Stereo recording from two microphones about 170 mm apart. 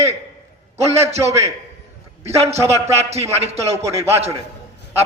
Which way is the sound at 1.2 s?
15° right (ahead or behind).